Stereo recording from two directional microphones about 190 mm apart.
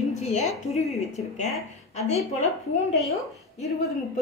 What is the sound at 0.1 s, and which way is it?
Speech, 35° left (ahead or behind).